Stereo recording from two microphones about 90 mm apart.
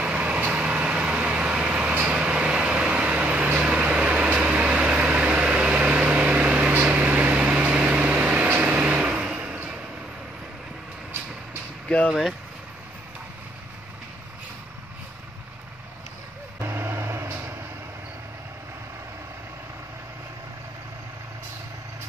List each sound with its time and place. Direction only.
0.0 s vehicle: 10° right (ahead or behind)
12.1 s speech: centre (ahead or behind)
16.5 s vehicle: 30° right (ahead or behind)